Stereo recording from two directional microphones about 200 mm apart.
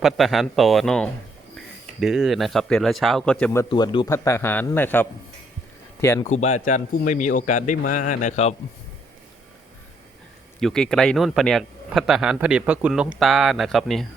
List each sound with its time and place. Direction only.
0.0 s a man's voice: centre (ahead or behind)
3.7 s a man's voice: 20° left (ahead or behind)
6.2 s a man's voice: 35° left (ahead or behind)
10.6 s a man's voice: centre (ahead or behind)